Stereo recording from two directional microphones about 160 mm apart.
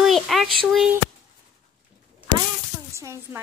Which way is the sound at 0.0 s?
Centre (ahead or behind).